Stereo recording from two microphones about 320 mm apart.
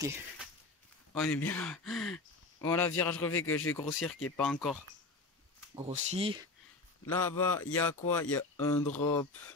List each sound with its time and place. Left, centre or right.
1.1 s speech: centre
5.9 s speech: centre
7.1 s speech: centre